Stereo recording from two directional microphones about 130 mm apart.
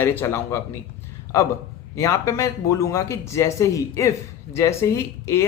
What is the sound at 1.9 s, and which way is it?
Speech, 25° left (ahead or behind).